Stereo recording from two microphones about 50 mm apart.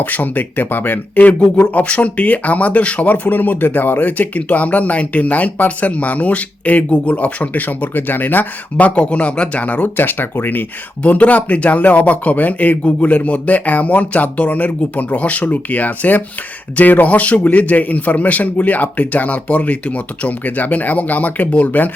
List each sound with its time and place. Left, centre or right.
0.0 s speech: left
1.4 s speech: centre
1.7 s speech: left
9.0 s speech: left